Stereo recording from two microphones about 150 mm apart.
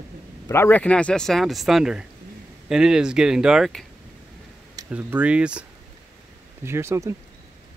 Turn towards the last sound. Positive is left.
turn(degrees=-20)  # may be behind; listen again after turning